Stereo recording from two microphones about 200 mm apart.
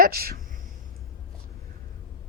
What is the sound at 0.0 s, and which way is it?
Speech, 50° right (ahead or behind).